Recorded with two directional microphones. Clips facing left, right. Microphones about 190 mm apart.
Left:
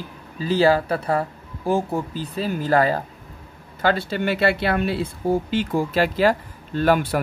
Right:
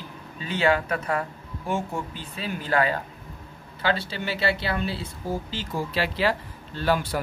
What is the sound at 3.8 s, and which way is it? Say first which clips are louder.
Speech: left 6 dB; 50° left (ahead or behind).